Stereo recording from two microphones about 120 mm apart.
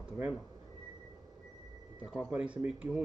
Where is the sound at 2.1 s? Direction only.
10° right (ahead or behind).